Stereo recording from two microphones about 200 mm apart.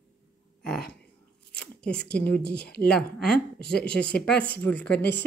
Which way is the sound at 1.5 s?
5° left (ahead or behind).